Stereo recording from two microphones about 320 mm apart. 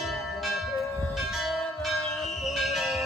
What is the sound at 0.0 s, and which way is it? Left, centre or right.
Church bell, centre.